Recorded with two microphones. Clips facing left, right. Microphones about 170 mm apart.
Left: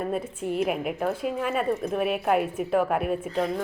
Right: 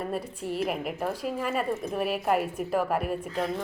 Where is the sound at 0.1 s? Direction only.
Centre (ahead or behind).